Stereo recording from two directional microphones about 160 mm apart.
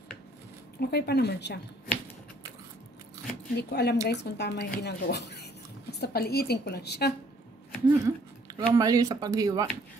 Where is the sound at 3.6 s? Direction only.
90° left.